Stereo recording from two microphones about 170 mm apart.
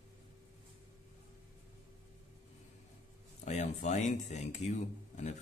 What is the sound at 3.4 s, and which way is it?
Speech, 45° left (ahead or behind).